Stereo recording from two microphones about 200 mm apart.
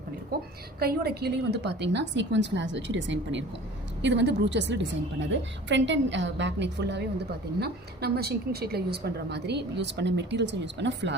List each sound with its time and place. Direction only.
0.8 s a woman's voice: 50° right (ahead or behind)